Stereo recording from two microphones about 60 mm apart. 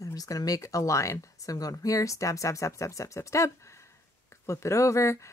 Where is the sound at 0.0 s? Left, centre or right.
Left.